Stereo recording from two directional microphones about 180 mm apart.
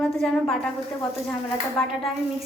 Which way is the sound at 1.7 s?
Centre (ahead or behind).